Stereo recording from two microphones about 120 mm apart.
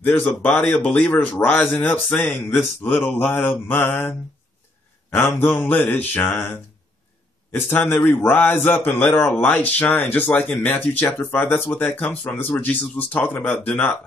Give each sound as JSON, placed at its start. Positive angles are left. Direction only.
{"t": 0.0, "sound": "a man's voice", "side_deg": 15}
{"t": 5.1, "sound": "a man's voice", "side_deg": 15}